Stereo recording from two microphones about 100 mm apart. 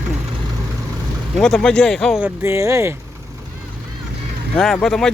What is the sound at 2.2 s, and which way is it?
Speech, 25° right (ahead or behind).